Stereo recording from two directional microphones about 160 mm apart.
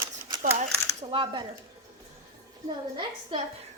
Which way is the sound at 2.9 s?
30° right (ahead or behind).